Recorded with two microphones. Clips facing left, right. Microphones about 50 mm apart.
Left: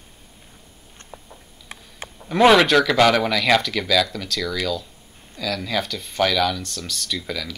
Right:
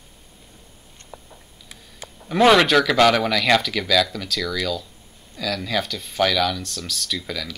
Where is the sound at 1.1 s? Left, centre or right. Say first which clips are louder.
Even; left.